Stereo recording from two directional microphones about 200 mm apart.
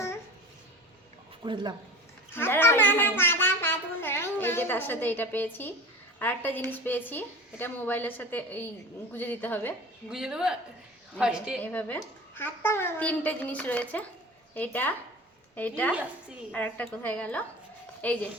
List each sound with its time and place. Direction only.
1.5 s speech: 25° right (ahead or behind)
2.3 s a child's voice: 10° left (ahead or behind)
10.1 s a woman's voice: 5° right (ahead or behind)
11.6 s a woman's voice: 10° left (ahead or behind)
15.9 s a woman's voice: 5° right (ahead or behind)
16.5 s a woman's voice: 10° left (ahead or behind)